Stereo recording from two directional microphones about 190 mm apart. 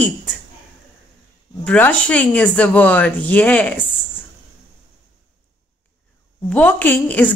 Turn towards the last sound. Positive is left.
turn(degrees=10)  # may be behind; listen again after turning